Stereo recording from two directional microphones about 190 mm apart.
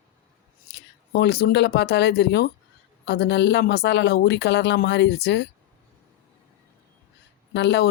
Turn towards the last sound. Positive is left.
turn(degrees=65)  # may be behind; listen again after turning